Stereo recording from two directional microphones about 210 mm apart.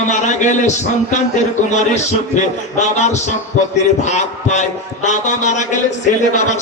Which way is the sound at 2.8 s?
35° left (ahead or behind).